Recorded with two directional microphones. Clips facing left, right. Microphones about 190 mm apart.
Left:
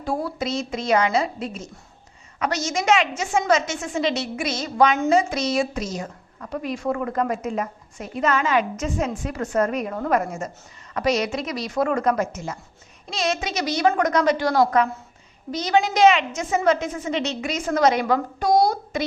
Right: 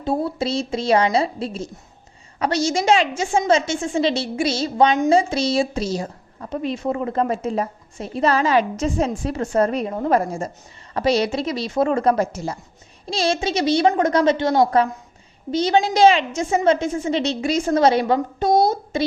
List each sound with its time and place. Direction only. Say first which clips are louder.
0.0 s a woman's voice: right 4 dB; 25° right (ahead or behind)